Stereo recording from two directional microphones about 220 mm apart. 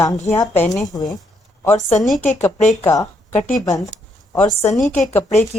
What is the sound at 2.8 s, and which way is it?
Speech, 15° left (ahead or behind).